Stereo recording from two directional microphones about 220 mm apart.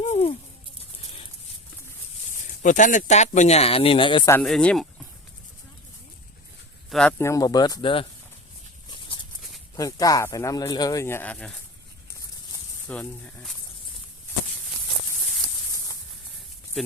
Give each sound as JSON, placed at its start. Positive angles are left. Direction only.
{"t": 0.0, "sound": "a sound", "side_deg": 30}
{"t": 2.6, "sound": "speech", "side_deg": 35}
{"t": 4.3, "sound": "speech", "side_deg": 5}
{"t": 6.9, "sound": "speech", "side_deg": 10}
{"t": 8.9, "sound": "a sound", "side_deg": 20}
{"t": 9.7, "sound": "speech", "side_deg": 15}
{"t": 12.9, "sound": "speech", "side_deg": 5}
{"t": 16.8, "sound": "speech", "side_deg": 0}